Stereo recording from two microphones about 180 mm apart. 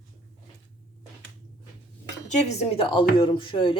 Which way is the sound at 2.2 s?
35° left (ahead or behind).